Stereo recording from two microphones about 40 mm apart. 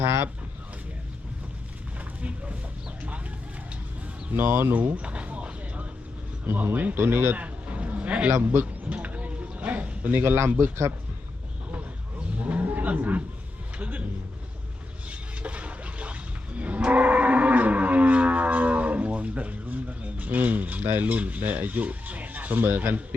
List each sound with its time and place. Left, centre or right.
2.2 s speech: right
4.4 s speech: right
4.7 s speech: right
5.0 s a sound: right
6.4 s speech: right
7.3 s a sound: right
12.4 s cattle: right
12.6 s roaring cats: right
13.7 s a man's voice: right
15.1 s toilet flush: right
16.6 s livestock: right
20.8 s speech: right
21.1 s speech: right